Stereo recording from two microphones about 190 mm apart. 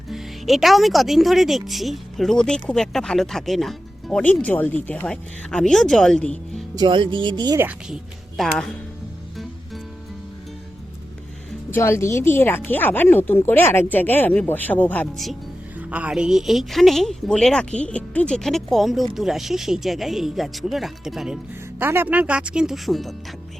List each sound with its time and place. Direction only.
0.1 s speech: centre (ahead or behind)
6.7 s speech: 25° right (ahead or behind)
8.4 s speech: 5° left (ahead or behind)
11.7 s speech: 15° left (ahead or behind)
15.9 s speech: 5° right (ahead or behind)